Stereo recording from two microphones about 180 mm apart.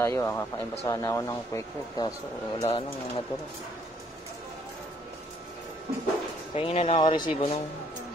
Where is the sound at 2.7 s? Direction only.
30° left (ahead or behind).